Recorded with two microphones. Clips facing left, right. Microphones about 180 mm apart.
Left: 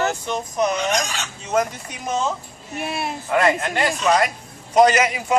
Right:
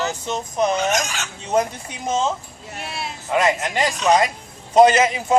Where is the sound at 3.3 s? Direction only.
20° right (ahead or behind).